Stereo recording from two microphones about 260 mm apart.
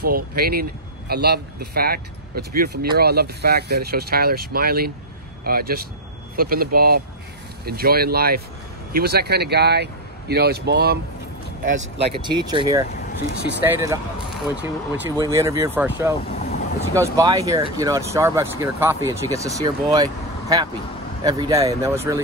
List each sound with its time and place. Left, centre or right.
0.0 s speech: right
11.6 s speech: right; by 13.9 s centre
15.0 s speech: centre
16.3 s vehicle: left
16.9 s speech: centre